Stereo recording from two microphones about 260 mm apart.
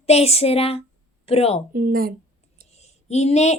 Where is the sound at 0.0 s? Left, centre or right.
Left.